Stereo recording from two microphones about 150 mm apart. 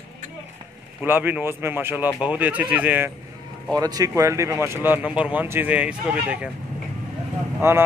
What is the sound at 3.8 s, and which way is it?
Speech, 25° right (ahead or behind).